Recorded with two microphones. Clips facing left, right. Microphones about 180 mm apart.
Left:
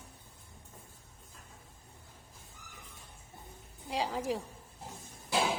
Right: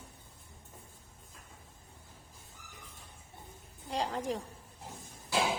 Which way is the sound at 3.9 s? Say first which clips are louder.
Left 1 dB; 5° left (ahead or behind).